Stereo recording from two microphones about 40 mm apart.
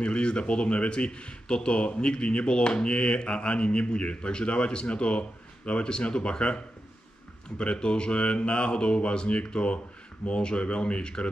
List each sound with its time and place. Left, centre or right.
0.0 s speech: left